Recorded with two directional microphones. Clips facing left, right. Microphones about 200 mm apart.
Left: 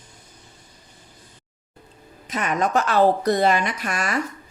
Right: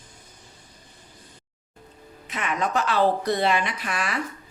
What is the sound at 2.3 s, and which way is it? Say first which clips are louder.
A woman's voice: left 4 dB; 40° left (ahead or behind).